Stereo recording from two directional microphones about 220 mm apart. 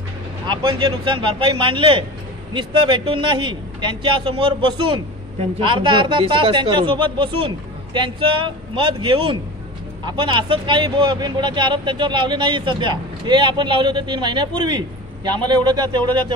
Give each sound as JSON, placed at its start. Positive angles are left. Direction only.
{"t": 0.5, "sound": "speech", "side_deg": -20}